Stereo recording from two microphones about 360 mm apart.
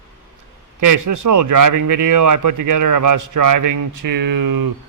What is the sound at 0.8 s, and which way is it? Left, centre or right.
Speech, right.